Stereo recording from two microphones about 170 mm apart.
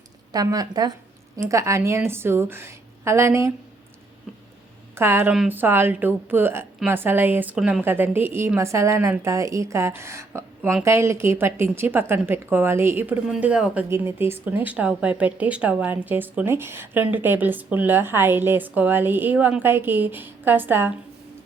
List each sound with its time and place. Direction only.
0.3 s speech: 20° right (ahead or behind)
4.9 s speech: 15° right (ahead or behind)